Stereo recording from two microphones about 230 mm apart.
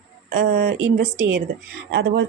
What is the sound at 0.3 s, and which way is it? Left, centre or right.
Speech, right.